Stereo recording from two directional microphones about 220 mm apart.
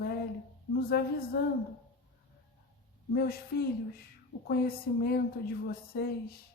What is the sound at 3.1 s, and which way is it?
Speech, 45° left (ahead or behind).